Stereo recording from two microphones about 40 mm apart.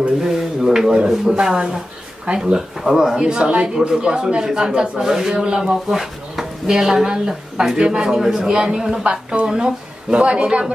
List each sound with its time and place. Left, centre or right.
0.2 s speech: centre
1.5 s speech: right
2.5 s speech: centre
3.2 s speech: right
9.0 s speech: right